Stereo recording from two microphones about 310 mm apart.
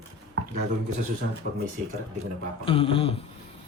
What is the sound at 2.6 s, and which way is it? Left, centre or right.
Speech, centre.